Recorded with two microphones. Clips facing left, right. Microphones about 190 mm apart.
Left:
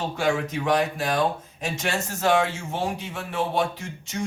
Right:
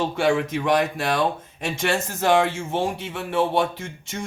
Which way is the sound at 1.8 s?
60° right (ahead or behind).